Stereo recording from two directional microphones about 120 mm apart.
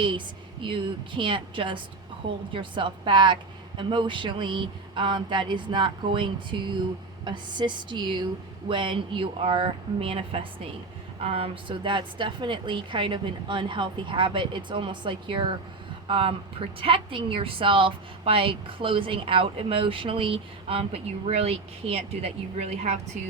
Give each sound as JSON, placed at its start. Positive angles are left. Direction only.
{"t": 0.6, "sound": "a woman's voice", "side_deg": -45}